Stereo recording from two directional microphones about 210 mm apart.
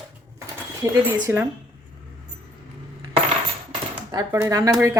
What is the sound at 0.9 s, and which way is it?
Speech, 10° right (ahead or behind).